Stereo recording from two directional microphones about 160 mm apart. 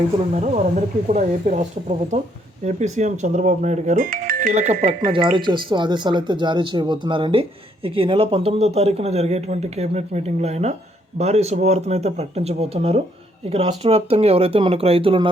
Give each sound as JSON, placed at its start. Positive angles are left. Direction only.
{"t": 0.3, "sound": "speech", "side_deg": -50}
{"t": 4.5, "sound": "speech", "side_deg": -45}
{"t": 4.9, "sound": "speech", "side_deg": -35}